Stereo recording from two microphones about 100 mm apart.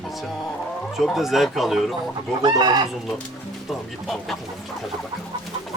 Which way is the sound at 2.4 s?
45° right (ahead or behind).